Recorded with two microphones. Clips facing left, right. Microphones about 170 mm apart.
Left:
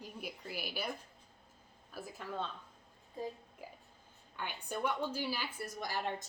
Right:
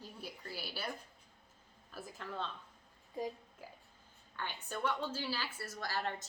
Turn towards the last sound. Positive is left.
turn(degrees=15)  # may be behind; listen again after turning